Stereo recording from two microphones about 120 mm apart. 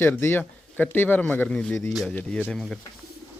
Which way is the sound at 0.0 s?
20° left (ahead or behind).